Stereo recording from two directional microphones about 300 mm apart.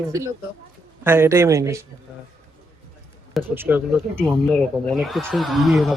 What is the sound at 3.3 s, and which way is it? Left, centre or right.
Speech, centre.